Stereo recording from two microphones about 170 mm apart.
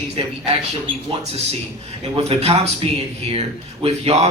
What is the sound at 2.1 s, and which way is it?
A man's voice, 35° right (ahead or behind).